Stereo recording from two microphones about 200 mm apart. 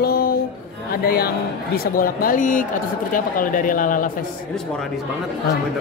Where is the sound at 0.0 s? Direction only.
50° left (ahead or behind).